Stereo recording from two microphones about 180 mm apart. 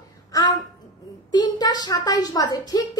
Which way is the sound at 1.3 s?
20° left (ahead or behind).